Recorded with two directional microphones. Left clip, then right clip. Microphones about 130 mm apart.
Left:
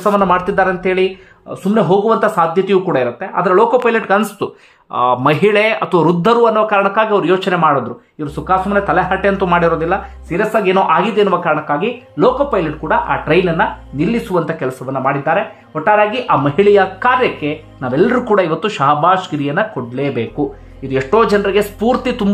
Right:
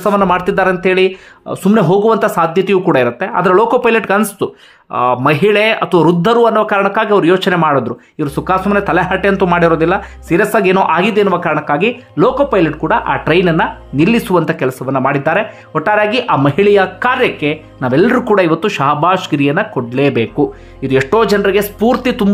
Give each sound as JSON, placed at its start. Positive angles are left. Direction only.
{"t": 0.1, "sound": "speech", "side_deg": -15}
{"t": 1.5, "sound": "speech", "side_deg": -35}
{"t": 2.1, "sound": "speech", "side_deg": -25}
{"t": 3.9, "sound": "speech", "side_deg": -25}
{"t": 11.1, "sound": "speech", "side_deg": -20}
{"t": 12.2, "sound": "speech", "side_deg": -40}
{"t": 12.4, "sound": "speech", "side_deg": -25}
{"t": 14.4, "sound": "speech", "side_deg": -25}
{"t": 16.5, "sound": "speech", "side_deg": -25}
{"t": 21.4, "sound": "speech", "side_deg": -20}